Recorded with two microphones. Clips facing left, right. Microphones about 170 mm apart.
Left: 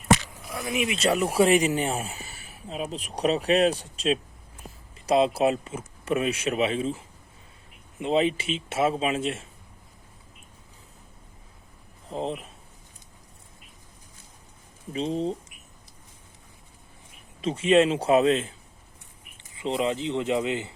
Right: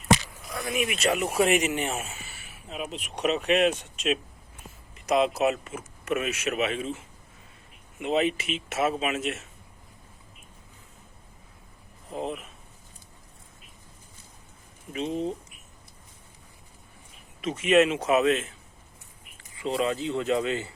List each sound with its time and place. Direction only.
0.7 s speech: 25° left (ahead or behind)
12.1 s speech: 30° left (ahead or behind)
14.9 s speech: 30° left (ahead or behind)
17.4 s speech: 30° left (ahead or behind)